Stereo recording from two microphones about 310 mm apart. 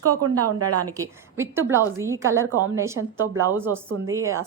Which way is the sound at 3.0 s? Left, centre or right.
Right.